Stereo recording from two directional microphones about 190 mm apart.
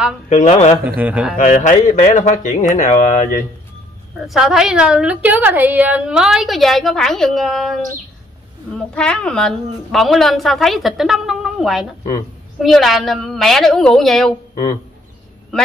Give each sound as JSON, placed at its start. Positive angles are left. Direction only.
{"t": 0.3, "sound": "speech", "side_deg": 35}
{"t": 0.8, "sound": "a man's voice", "side_deg": -10}
{"t": 1.3, "sound": "speech", "side_deg": 40}
{"t": 4.2, "sound": "a woman's voice", "side_deg": 0}
{"t": 14.5, "sound": "speech", "side_deg": 50}